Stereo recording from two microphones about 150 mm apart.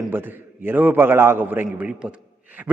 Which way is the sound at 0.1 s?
15° right (ahead or behind).